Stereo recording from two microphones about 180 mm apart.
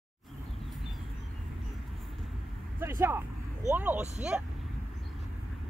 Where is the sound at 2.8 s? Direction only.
15° right (ahead or behind).